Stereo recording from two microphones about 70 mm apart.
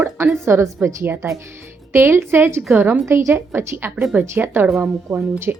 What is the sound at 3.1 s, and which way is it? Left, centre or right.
A woman's voice, right.